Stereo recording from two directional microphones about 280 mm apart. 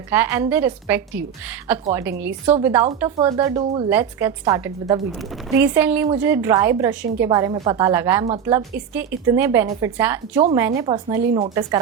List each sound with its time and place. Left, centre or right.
0.1 s a woman's voice: centre
3.6 s speech: right
3.8 s a woman's voice: centre